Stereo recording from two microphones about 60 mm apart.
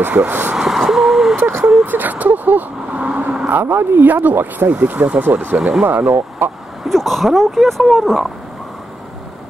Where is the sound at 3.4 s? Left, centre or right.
Right.